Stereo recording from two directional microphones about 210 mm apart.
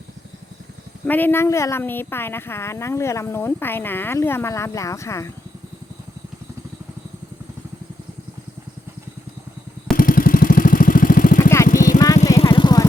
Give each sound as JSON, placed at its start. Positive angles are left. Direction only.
{"t": 1.0, "sound": "speech", "side_deg": 10}
{"t": 9.9, "sound": "vehicle", "side_deg": 45}
{"t": 11.3, "sound": "vehicle", "side_deg": 10}
{"t": 11.7, "sound": "vehicle", "side_deg": 40}
{"t": 11.9, "sound": "vehicle", "side_deg": 15}